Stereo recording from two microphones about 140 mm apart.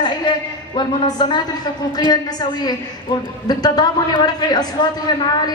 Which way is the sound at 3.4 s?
30° left (ahead or behind).